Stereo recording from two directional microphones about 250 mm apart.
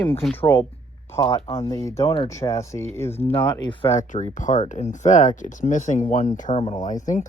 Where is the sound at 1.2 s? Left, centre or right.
Left.